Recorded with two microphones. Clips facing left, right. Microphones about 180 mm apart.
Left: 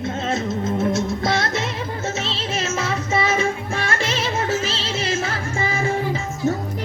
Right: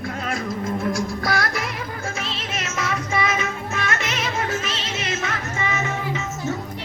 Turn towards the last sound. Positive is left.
turn(degrees=30)  # may be behind; listen again after turning